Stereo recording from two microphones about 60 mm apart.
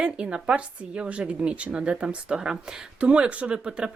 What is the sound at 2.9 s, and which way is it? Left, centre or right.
Speech, right.